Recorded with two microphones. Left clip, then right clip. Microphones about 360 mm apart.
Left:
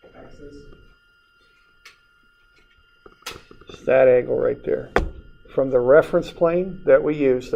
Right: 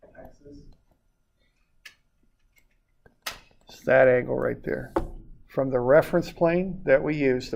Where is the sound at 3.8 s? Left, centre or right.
Right.